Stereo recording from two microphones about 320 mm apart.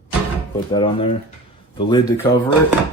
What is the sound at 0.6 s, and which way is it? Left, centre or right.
Speech, centre.